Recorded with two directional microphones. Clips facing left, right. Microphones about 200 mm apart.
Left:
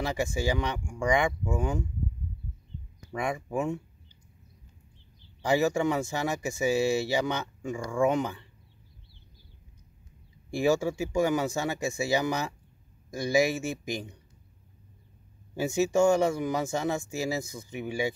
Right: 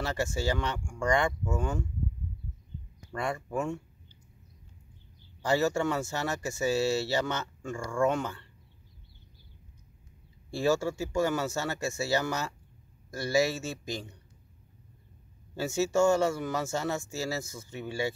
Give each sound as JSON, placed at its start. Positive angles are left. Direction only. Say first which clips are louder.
{"t": 0.0, "sound": "speech", "louder": "left 2 dB", "side_deg": 15}
{"t": 3.1, "sound": "speech", "louder": "left 2 dB", "side_deg": 15}
{"t": 5.4, "sound": "speech", "louder": "left 2 dB", "side_deg": 15}
{"t": 10.5, "sound": "speech", "louder": "left 2 dB", "side_deg": 15}
{"t": 15.5, "sound": "speech", "louder": "left 2 dB", "side_deg": 15}